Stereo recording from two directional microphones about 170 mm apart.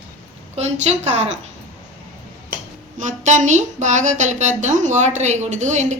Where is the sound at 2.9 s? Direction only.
45° right (ahead or behind).